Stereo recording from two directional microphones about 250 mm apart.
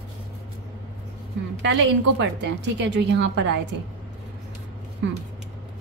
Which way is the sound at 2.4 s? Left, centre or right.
Right.